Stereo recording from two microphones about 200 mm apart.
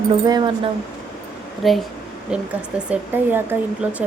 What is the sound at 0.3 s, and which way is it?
Speech, 20° right (ahead or behind).